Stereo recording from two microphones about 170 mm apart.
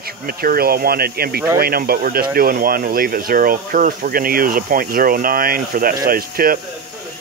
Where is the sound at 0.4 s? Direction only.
60° right (ahead or behind).